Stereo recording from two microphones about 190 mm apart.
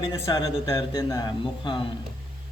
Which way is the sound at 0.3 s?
20° left (ahead or behind).